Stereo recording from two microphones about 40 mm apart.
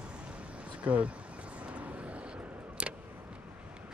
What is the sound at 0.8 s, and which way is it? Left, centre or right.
Speech, right.